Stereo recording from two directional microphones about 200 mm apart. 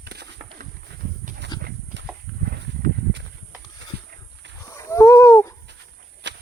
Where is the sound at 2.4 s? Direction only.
50° right (ahead or behind).